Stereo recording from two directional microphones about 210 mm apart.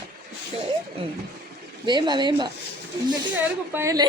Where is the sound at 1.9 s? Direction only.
20° right (ahead or behind).